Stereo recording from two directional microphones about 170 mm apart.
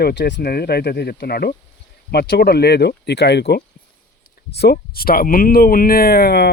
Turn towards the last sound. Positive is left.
turn(degrees=65)  # may be behind; listen again after turning